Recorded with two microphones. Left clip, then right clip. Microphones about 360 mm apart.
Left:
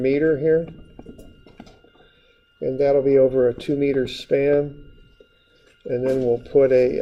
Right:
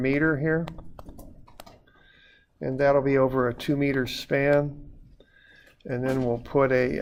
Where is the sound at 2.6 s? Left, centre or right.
Right.